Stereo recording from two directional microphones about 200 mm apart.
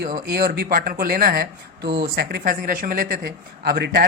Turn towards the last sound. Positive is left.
turn(degrees=-45)  # may be behind; listen again after turning